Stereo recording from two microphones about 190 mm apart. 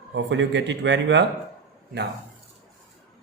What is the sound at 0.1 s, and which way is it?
Speech, 70° right (ahead or behind).